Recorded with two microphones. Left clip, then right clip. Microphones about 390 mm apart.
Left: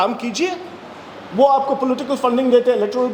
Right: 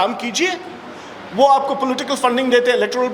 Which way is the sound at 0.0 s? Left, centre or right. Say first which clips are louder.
Right 1 dB; centre.